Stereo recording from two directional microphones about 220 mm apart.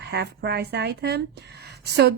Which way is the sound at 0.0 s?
50° right (ahead or behind).